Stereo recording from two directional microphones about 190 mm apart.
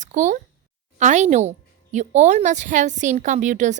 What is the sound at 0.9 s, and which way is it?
A woman's voice, 40° right (ahead or behind).